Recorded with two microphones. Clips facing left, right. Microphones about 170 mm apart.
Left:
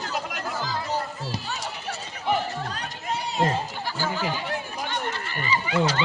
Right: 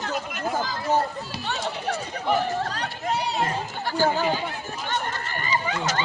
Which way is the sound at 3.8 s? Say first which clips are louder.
Right 10 dB; 50° right (ahead or behind).